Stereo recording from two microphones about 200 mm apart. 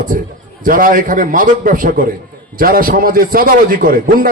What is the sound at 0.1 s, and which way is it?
A man's voice, 45° right (ahead or behind).